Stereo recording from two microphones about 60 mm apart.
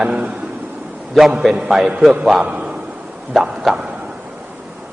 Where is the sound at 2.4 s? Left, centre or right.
Right.